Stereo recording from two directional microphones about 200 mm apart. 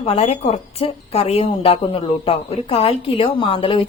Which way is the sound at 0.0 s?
30° left (ahead or behind).